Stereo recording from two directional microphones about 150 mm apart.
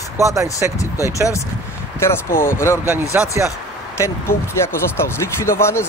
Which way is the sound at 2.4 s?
15° left (ahead or behind).